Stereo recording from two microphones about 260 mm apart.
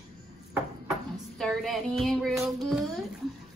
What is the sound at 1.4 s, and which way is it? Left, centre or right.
A woman's voice, centre.